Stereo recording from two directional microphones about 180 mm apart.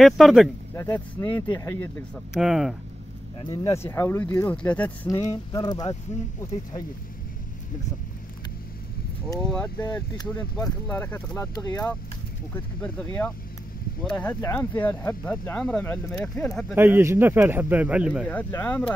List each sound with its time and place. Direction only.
0.0 s speech: centre (ahead or behind)
0.7 s speech: 10° left (ahead or behind)
2.3 s speech: 5° right (ahead or behind)
3.3 s speech: 20° left (ahead or behind)
5.0 s speech: 20° left (ahead or behind)
9.4 s speech: 5° left (ahead or behind)
9.8 s speech: 20° left (ahead or behind)
10.5 s speech: 5° left (ahead or behind)
16.7 s a man's voice: 10° right (ahead or behind)
18.2 s speech: 10° left (ahead or behind)